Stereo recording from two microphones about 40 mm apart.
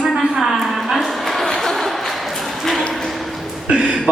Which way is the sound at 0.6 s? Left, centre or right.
Centre.